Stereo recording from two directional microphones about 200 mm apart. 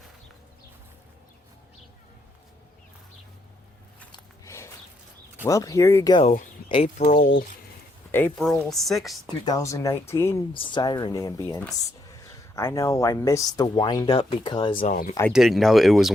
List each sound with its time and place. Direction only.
4.1 s a sound: 15° left (ahead or behind)
5.5 s speech: 15° left (ahead or behind)
6.8 s speech: 40° left (ahead or behind)
8.1 s speech: 5° left (ahead or behind)
9.5 s speech: 15° left (ahead or behind)
10.5 s speech: 25° left (ahead or behind)
14.8 s speech: 45° left (ahead or behind)
15.3 s speech: centre (ahead or behind)